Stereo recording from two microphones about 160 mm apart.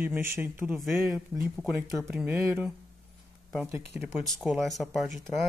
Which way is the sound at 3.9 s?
5° right (ahead or behind).